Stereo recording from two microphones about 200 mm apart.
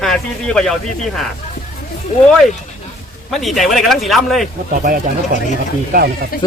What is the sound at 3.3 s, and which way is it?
Speech, centre (ahead or behind).